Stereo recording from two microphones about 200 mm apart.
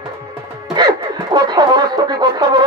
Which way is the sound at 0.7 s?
20° right (ahead or behind).